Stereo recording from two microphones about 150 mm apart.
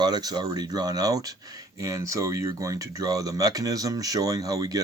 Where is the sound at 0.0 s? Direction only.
25° right (ahead or behind).